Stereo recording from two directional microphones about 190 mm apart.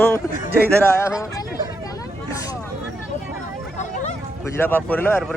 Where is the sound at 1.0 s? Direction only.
15° left (ahead or behind).